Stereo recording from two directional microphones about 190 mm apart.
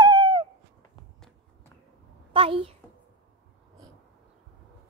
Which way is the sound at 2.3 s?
30° right (ahead or behind).